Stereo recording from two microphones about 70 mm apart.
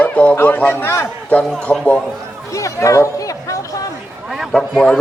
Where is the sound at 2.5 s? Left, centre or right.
Left.